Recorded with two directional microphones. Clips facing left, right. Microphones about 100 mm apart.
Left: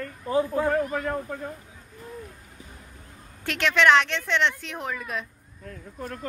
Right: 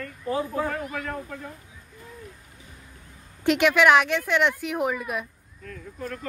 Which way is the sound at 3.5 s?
10° right (ahead or behind).